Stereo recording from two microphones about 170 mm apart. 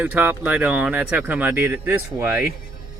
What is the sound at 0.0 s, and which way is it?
Speech, 10° right (ahead or behind).